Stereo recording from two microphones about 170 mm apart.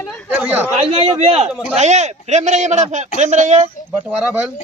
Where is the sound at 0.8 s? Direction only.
35° right (ahead or behind).